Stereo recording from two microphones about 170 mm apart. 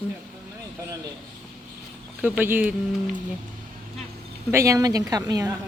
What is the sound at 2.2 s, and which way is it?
Speech, 10° right (ahead or behind).